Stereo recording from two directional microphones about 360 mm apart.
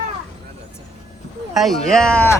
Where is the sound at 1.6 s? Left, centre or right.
Centre.